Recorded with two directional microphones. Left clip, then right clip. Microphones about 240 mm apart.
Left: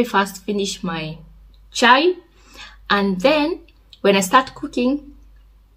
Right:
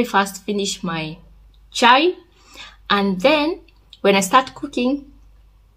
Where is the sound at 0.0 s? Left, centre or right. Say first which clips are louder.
Even; centre.